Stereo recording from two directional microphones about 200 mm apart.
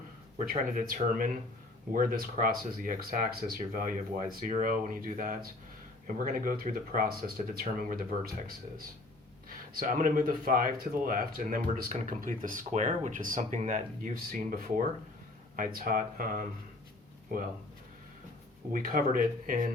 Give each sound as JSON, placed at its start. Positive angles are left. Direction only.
{"t": 0.3, "sound": "speech", "side_deg": -40}
{"t": 9.7, "sound": "speech", "side_deg": -45}
{"t": 18.7, "sound": "speech", "side_deg": -45}